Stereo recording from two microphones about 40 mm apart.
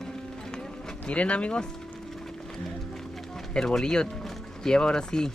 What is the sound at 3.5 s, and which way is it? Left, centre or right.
Speech, centre.